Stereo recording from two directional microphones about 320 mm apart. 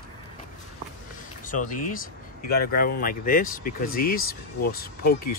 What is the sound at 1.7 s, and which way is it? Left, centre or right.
Speech, left.